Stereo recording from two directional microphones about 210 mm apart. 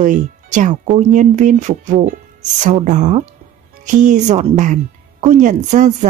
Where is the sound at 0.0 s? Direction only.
35° right (ahead or behind).